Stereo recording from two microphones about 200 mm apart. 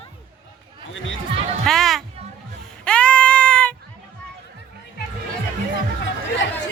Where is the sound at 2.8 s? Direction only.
5° left (ahead or behind).